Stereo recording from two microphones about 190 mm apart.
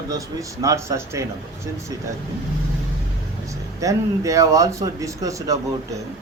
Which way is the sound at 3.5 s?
15° right (ahead or behind).